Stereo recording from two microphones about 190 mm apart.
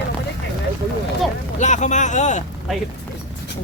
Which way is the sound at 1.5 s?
40° left (ahead or behind).